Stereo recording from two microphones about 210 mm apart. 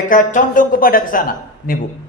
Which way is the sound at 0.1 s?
40° left (ahead or behind).